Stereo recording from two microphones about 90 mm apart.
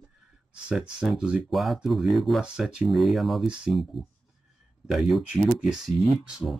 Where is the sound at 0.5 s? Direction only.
10° right (ahead or behind).